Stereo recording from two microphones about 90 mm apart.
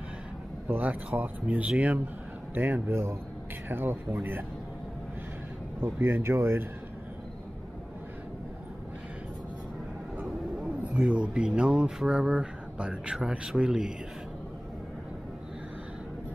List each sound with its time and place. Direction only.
0.7 s speech: 20° right (ahead or behind)
5.8 s speech: 25° right (ahead or behind)
10.1 s speech: 10° right (ahead or behind)